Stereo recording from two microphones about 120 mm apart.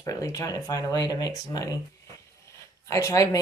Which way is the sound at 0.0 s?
30° left (ahead or behind).